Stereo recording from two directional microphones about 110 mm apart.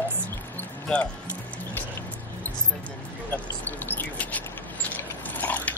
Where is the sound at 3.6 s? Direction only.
15° left (ahead or behind).